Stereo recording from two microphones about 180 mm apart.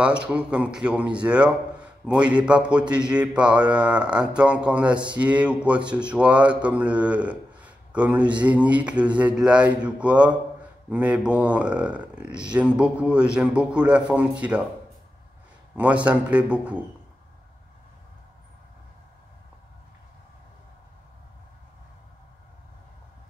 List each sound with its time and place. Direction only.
0.0 s speech: 5° right (ahead or behind)
15.7 s speech: 10° right (ahead or behind)